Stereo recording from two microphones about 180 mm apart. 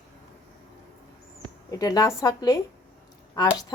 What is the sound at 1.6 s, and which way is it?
Speech, 20° left (ahead or behind).